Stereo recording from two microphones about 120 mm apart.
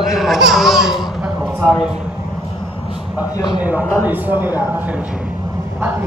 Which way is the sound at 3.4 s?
35° left (ahead or behind).